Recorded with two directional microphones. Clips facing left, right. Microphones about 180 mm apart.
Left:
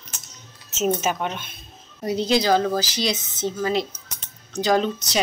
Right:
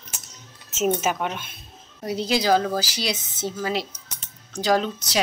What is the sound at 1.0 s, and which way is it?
Speech, 5° right (ahead or behind).